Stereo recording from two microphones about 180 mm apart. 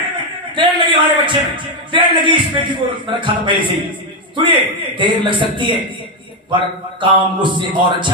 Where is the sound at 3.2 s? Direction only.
25° right (ahead or behind).